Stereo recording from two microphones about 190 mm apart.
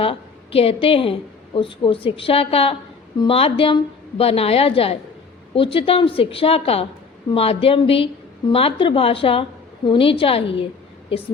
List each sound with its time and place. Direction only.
0.0 s a woman's voice: 30° left (ahead or behind)